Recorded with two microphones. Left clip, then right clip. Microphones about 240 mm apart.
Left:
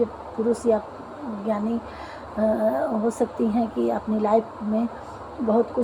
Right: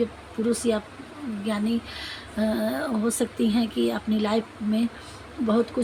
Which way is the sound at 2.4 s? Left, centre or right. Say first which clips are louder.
Left 5 dB; right.